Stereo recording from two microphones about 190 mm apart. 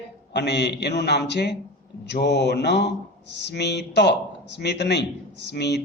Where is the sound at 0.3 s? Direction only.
65° left (ahead or behind).